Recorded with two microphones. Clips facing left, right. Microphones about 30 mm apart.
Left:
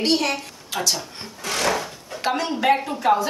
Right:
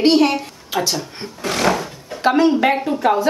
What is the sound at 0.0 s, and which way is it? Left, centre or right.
A woman's voice, centre.